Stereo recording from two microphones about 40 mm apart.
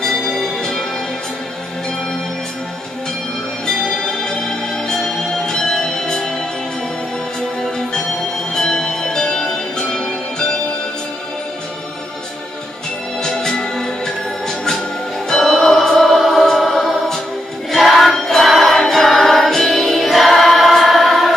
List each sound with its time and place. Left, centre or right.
0.0 s music: centre
3.6 s music: centre
8.5 s music: centre
13.2 s music: centre
15.2 s music: centre